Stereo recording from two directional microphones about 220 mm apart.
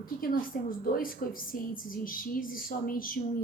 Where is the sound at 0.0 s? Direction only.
40° left (ahead or behind).